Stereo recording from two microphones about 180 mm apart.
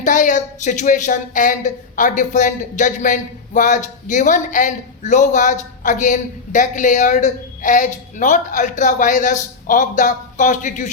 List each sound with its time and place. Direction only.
0.0 s speech: 45° left (ahead or behind)